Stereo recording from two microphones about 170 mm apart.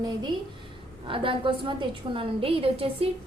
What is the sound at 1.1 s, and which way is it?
A woman's voice, 30° right (ahead or behind).